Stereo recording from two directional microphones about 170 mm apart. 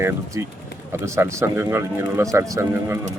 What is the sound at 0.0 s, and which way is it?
Speech, 15° right (ahead or behind).